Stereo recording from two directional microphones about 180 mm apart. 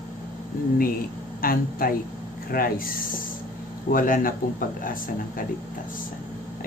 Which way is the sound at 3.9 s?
50° left (ahead or behind).